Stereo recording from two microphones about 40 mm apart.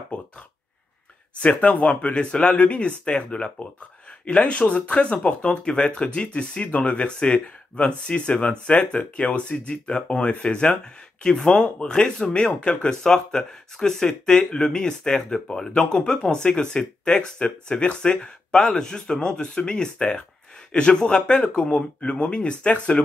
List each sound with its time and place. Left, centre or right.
1.4 s speech: left
2.6 s speech: left
11.2 s speech: centre